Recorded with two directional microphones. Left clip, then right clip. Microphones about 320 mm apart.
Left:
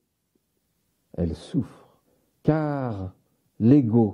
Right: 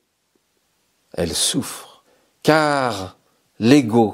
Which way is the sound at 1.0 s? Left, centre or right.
Centre.